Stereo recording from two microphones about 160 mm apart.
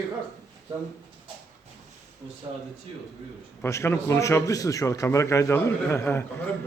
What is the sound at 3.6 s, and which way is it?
A man's voice, 15° left (ahead or behind).